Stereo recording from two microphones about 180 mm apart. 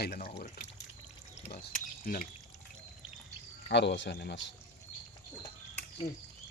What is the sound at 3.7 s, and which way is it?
Speech, 75° left (ahead or behind).